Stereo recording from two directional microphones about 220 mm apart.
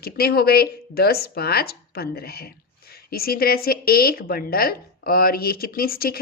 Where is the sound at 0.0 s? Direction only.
45° left (ahead or behind).